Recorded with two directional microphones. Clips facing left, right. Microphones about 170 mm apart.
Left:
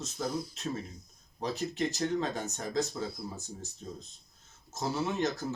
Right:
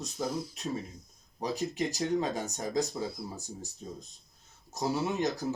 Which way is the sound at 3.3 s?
35° right (ahead or behind).